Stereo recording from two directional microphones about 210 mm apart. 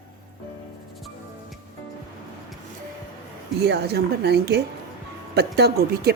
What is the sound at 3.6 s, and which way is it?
Speech, 50° right (ahead or behind).